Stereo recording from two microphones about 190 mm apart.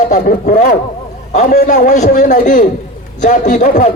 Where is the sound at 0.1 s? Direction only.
50° left (ahead or behind).